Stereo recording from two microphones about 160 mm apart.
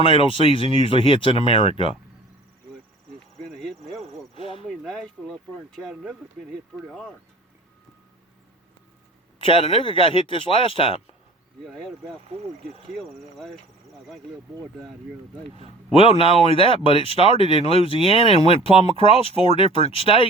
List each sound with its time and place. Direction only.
0.0 s speech: 35° left (ahead or behind)
4.4 s a sound: 35° left (ahead or behind)
4.6 s speech: centre (ahead or behind)
9.4 s speech: 35° left (ahead or behind)
11.6 s speech: centre (ahead or behind)
15.5 s speech: 35° left (ahead or behind)